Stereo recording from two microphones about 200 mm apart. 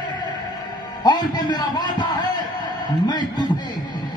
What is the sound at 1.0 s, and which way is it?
A man's voice, 20° left (ahead or behind).